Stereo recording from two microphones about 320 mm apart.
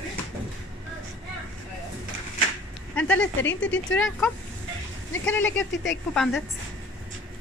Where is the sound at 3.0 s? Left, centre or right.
Centre.